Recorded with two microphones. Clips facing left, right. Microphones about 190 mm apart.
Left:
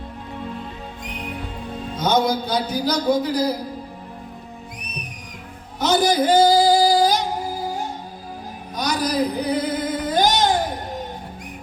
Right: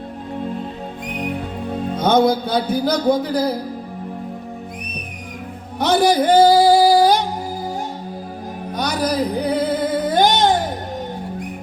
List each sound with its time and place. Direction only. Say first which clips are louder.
0.3 s music: right 6 dB; 45° right (ahead or behind)
5.8 s music: right 3 dB; 60° right (ahead or behind)
8.7 s a sound: right 2 dB; 55° right (ahead or behind)